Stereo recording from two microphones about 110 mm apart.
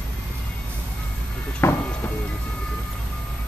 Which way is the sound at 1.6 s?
25° left (ahead or behind).